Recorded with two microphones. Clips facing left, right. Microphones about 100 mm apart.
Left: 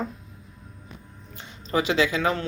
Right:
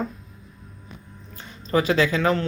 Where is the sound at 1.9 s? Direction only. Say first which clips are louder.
Right 2 dB; 10° left (ahead or behind).